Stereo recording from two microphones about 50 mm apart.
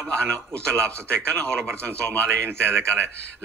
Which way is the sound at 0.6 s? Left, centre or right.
Right.